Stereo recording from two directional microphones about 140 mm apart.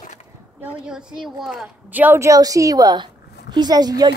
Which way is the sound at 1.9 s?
15° right (ahead or behind).